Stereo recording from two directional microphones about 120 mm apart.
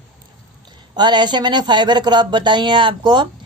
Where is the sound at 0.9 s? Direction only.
40° right (ahead or behind).